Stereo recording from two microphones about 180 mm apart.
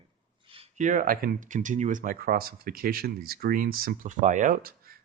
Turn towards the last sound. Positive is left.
turn(degrees=-55)  # may be behind; listen again after turning